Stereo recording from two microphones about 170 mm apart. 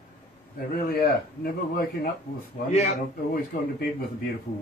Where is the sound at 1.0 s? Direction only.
60° left (ahead or behind).